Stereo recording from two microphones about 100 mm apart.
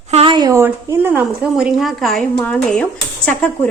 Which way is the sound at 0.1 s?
90° right.